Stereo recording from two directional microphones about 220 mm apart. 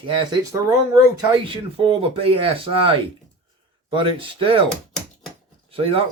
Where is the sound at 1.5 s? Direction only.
25° right (ahead or behind).